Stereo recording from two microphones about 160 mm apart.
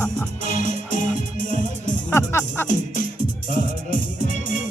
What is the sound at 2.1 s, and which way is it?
Music, 15° left (ahead or behind).